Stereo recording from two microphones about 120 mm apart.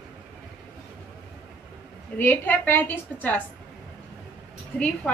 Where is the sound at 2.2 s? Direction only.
15° left (ahead or behind).